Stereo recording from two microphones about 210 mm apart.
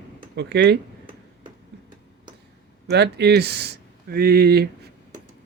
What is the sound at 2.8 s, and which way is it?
Speech, 50° right (ahead or behind).